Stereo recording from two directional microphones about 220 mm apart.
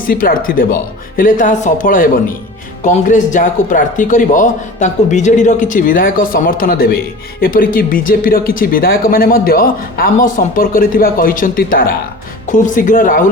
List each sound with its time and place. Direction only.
0.1 s speech: 40° left (ahead or behind)